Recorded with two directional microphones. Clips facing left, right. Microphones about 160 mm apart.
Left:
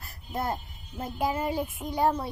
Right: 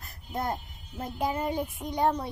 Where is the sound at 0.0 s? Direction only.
5° left (ahead or behind).